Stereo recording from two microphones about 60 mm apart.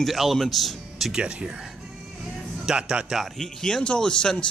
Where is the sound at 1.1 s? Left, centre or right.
Centre.